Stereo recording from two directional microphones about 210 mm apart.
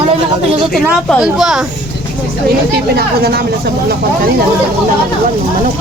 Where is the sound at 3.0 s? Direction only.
50° right (ahead or behind).